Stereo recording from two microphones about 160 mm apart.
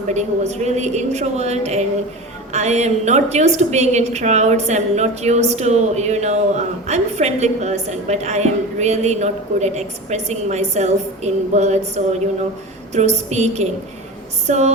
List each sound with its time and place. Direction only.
0.1 s a woman's voice: 45° right (ahead or behind)